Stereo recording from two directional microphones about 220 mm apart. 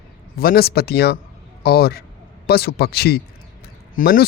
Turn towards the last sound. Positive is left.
turn(degrees=40)  # may be behind; listen again after turning